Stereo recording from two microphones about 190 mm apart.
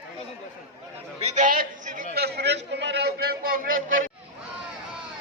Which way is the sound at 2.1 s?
60° right (ahead or behind).